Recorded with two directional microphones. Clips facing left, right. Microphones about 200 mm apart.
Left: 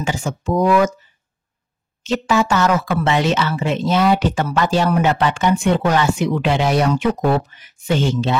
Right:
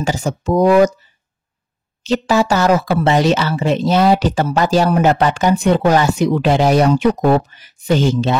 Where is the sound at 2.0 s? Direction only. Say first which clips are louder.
Right 3 dB; 35° right (ahead or behind).